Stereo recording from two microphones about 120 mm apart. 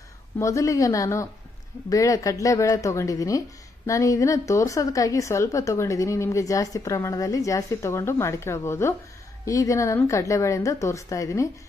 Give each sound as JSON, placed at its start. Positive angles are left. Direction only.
{"t": 0.4, "sound": "speech", "side_deg": 25}